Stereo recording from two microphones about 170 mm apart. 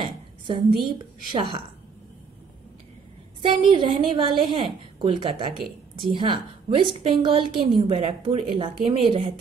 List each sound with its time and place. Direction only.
0.7 s a woman's voice: 30° right (ahead or behind)
3.4 s a woman's voice: 30° right (ahead or behind)